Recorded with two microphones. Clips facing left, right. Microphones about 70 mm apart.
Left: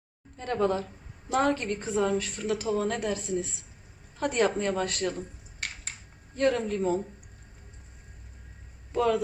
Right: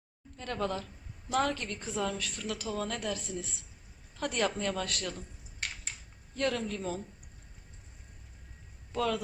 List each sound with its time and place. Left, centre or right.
0.3 s a woman's voice: left
6.3 s a woman's voice: left
8.9 s speech: left